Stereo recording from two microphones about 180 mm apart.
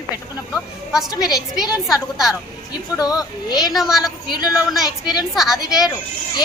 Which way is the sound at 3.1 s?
20° left (ahead or behind).